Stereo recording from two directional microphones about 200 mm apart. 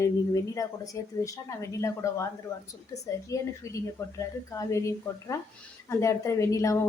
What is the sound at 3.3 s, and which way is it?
A woman's voice, 15° left (ahead or behind).